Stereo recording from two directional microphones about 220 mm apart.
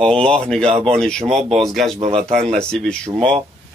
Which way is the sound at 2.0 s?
30° right (ahead or behind).